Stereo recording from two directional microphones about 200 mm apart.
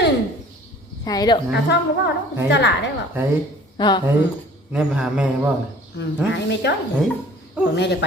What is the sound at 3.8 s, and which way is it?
Speech, 20° left (ahead or behind).